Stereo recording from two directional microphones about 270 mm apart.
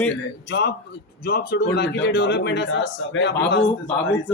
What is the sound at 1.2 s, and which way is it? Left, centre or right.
A man's voice, left.